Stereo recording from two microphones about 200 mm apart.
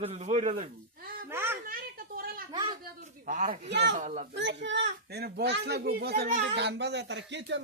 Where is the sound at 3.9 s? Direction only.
35° right (ahead or behind).